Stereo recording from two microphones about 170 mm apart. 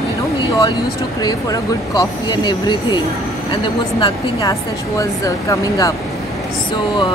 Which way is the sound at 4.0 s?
25° left (ahead or behind).